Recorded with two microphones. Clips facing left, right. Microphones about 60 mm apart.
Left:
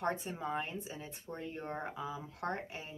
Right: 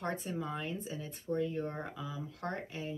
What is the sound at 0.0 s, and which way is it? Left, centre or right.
Speech, left.